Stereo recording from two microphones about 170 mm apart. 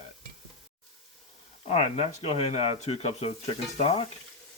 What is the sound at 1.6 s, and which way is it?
Speech, 35° left (ahead or behind).